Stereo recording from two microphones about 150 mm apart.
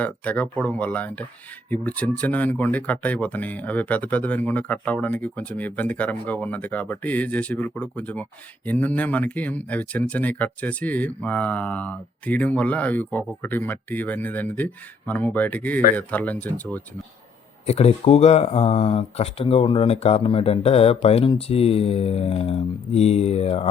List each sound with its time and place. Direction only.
0.0 s speech: 10° left (ahead or behind)
17.7 s speech: 45° left (ahead or behind)